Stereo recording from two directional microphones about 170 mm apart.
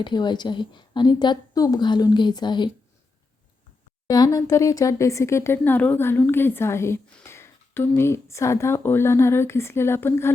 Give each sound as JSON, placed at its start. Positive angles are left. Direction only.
{"t": 0.0, "sound": "a woman's voice", "side_deg": 25}
{"t": 4.0, "sound": "speech", "side_deg": 20}